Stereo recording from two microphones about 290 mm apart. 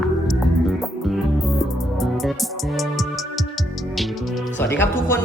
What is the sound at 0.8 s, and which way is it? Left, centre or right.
Music, centre.